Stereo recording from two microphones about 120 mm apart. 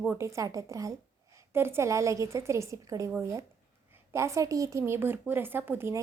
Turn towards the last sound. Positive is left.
turn(degrees=-20)  # may be behind; listen again after turning